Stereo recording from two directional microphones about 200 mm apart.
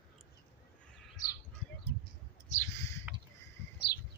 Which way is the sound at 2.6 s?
15° left (ahead or behind).